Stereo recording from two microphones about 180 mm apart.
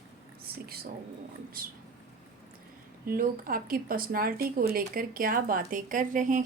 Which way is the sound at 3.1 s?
55° right (ahead or behind).